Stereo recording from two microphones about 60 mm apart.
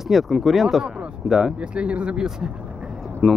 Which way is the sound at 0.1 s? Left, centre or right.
Centre.